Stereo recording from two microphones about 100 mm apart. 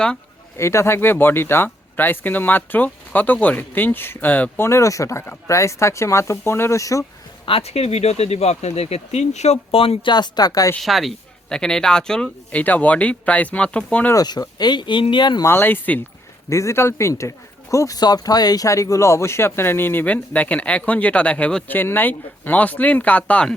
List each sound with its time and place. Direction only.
0.5 s speech: 30° left (ahead or behind)
7.4 s speech: 80° left
10.1 s speech: 45° left (ahead or behind)
10.8 s speech: centre (ahead or behind)
14.1 s speech: 40° left (ahead or behind)
15.4 s speech: 20° left (ahead or behind)
16.5 s speech: 30° left (ahead or behind); by 23.6 s 10° left (ahead or behind)